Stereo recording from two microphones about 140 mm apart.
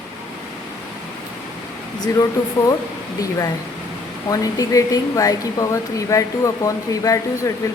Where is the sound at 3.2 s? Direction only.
25° left (ahead or behind).